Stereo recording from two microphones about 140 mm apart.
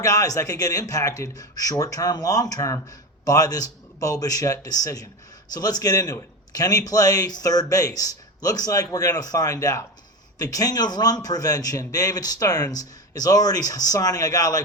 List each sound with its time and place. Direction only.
0.0 s speech: 25° left (ahead or behind)